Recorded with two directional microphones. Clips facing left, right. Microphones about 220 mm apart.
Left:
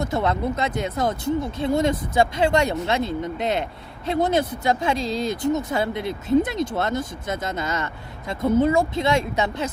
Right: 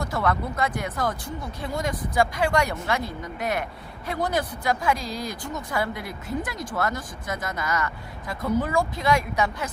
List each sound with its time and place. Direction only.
0.0 s speech: 20° left (ahead or behind)